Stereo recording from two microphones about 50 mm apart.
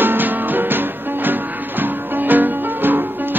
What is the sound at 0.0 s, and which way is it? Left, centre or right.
Music, right.